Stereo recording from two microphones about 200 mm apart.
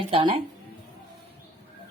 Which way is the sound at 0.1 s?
25° right (ahead or behind).